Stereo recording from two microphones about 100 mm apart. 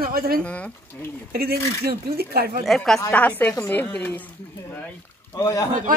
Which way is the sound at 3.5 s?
20° left (ahead or behind).